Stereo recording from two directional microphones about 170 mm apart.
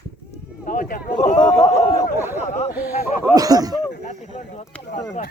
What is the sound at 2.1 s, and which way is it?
Speech, 15° right (ahead or behind).